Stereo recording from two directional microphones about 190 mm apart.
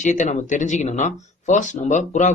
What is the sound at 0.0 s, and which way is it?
Speech, 40° left (ahead or behind).